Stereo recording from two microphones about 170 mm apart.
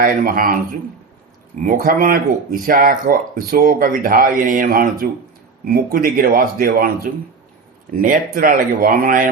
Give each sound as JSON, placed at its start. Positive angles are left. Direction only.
{"t": 0.0, "sound": "speech", "side_deg": -55}
{"t": 1.6, "sound": "speech", "side_deg": -55}